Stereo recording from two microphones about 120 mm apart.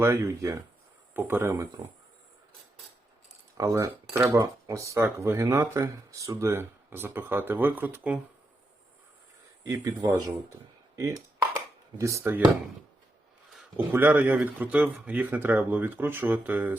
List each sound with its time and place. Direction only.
0.0 s speech: 20° right (ahead or behind)
3.6 s speech: 25° right (ahead or behind)
9.6 s speech: 30° right (ahead or behind)
13.7 s speech: 15° right (ahead or behind)